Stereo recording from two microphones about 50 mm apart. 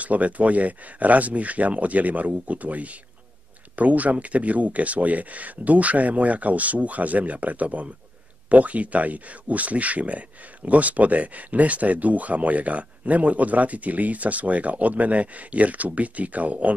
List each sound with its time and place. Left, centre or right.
0.0 s speech: right